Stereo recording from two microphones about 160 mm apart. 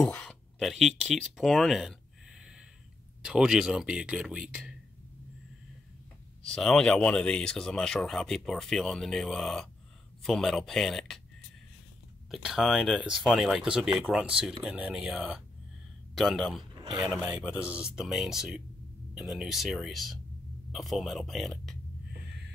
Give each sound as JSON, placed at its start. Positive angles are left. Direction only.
{"t": 0.0, "sound": "speech", "side_deg": 5}
{"t": 3.2, "sound": "speech", "side_deg": -5}
{"t": 6.4, "sound": "speech", "side_deg": 5}
{"t": 12.3, "sound": "speech", "side_deg": 0}
{"t": 16.8, "sound": "speech", "side_deg": -30}
{"t": 17.6, "sound": "speech", "side_deg": -5}